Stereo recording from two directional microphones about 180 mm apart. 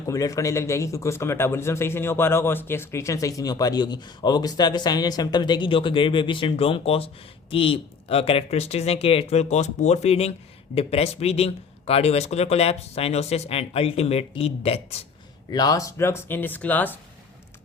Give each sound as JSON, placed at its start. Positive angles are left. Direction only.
{"t": 0.1, "sound": "a man's voice", "side_deg": 20}
{"t": 15.4, "sound": "speech", "side_deg": 20}